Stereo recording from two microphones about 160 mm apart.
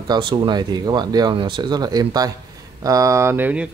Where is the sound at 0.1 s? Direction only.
30° right (ahead or behind).